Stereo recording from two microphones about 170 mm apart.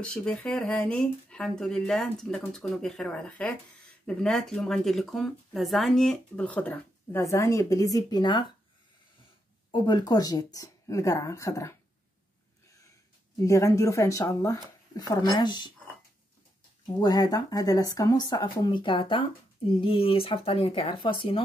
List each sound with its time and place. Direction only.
0.0 s speech: 5° left (ahead or behind); by 8.5 s 25° left (ahead or behind)
9.7 s speech: 25° left (ahead or behind)
13.4 s speech: 20° left (ahead or behind)
17.0 s speech: 25° left (ahead or behind)